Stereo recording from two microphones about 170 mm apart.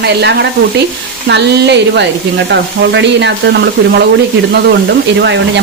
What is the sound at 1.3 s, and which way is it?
Speech, 90° right.